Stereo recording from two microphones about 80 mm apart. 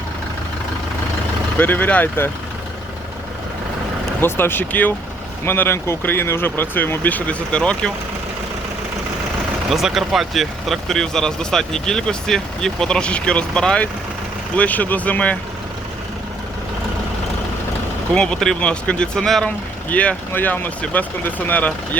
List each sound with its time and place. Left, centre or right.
1.5 s speech: left
4.2 s speech: left
9.6 s speech: centre
18.1 s speech: centre
19.5 s speech: centre